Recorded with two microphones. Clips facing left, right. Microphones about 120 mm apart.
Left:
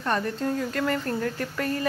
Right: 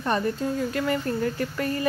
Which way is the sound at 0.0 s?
10° right (ahead or behind).